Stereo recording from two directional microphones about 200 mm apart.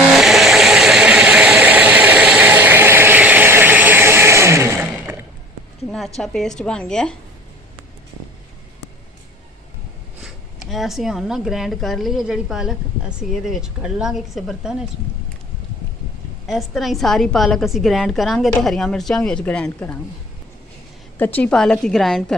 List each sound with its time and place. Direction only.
0.1 s vehicle: centre (ahead or behind)
6.1 s speech: centre (ahead or behind)
10.7 s speech: centre (ahead or behind)
16.5 s speech: centre (ahead or behind)
21.2 s speech: 10° left (ahead or behind)